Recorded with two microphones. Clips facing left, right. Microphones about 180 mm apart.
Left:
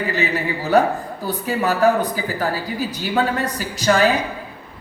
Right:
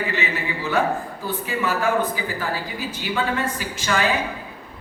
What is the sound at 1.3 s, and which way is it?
Speech, 40° left (ahead or behind).